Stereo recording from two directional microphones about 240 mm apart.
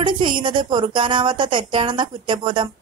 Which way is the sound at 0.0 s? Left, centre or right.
Centre.